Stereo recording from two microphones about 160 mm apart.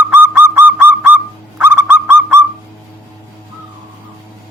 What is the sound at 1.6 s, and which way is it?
Owl, 15° right (ahead or behind).